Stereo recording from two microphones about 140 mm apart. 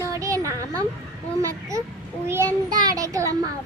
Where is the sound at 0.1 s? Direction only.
25° right (ahead or behind).